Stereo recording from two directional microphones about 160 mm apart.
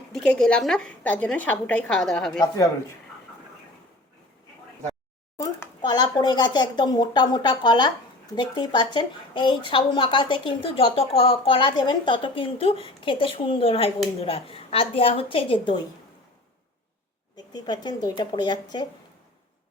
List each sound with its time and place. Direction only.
0.1 s a woman's voice: 5° left (ahead or behind)
5.4 s a woman's voice: 25° left (ahead or behind)
17.3 s speech: 25° left (ahead or behind)